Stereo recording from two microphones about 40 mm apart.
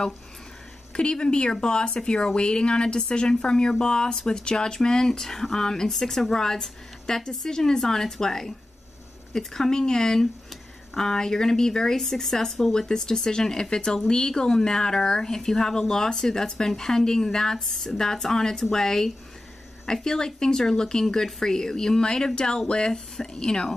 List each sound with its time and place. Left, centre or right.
0.9 s speech: left